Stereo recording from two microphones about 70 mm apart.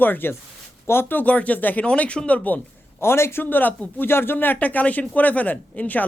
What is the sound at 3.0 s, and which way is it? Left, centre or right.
A man's voice, left.